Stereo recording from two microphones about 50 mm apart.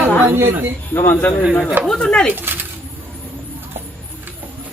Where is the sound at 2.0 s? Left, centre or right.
Left.